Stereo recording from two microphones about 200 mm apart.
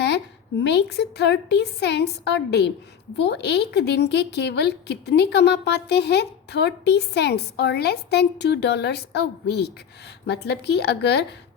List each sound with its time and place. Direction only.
0.6 s a woman's voice: 55° left (ahead or behind)